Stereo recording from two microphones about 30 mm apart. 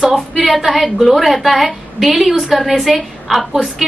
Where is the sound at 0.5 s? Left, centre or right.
Centre.